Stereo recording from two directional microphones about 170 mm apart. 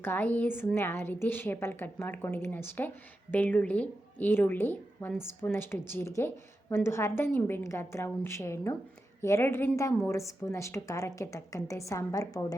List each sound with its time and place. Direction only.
0.0 s a woman's voice: 10° left (ahead or behind)